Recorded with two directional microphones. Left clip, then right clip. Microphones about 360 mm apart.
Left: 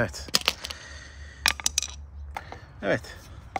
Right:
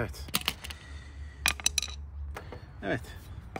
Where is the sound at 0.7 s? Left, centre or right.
Left.